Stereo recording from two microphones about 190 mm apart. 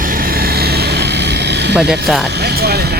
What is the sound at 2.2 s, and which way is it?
Speech, 60° right (ahead or behind).